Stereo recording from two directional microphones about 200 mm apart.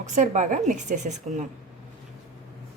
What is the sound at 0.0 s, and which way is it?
A woman's voice, 35° right (ahead or behind).